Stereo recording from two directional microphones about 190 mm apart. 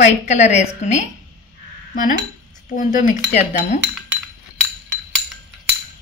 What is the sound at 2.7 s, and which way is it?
A woman's voice, 45° left (ahead or behind).